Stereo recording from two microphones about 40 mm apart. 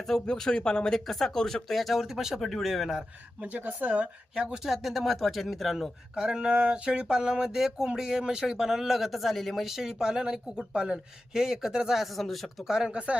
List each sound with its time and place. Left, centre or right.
0.3 s speech: centre
0.9 s speech: centre
3.8 s speech: right
4.4 s a man's voice: centre
4.7 s speech: centre
5.7 s a man's voice: centre
6.4 s a man's voice: right; by 9.6 s centre
9.6 s a man's voice: centre
11.9 s speech: centre
12.6 s a man's voice: centre
12.9 s speech: right